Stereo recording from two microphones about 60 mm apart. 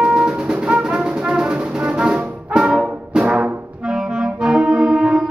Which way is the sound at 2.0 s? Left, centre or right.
Centre.